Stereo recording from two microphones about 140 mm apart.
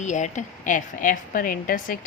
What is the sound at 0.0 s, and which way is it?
A woman's voice, 60° left (ahead or behind).